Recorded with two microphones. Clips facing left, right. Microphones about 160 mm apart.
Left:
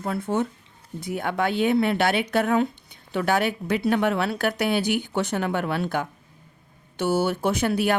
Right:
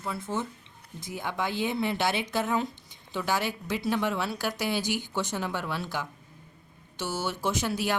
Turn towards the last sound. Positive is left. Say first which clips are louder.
# left 6 dB
turn(degrees=60)  # may be behind; listen again after turning